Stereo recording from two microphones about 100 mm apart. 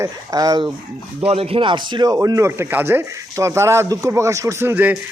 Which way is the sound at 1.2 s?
70° right (ahead or behind).